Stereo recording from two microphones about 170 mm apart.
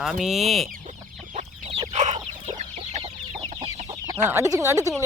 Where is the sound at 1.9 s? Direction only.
40° right (ahead or behind).